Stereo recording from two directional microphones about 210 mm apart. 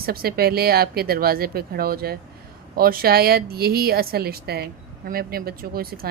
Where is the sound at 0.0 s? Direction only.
45° right (ahead or behind).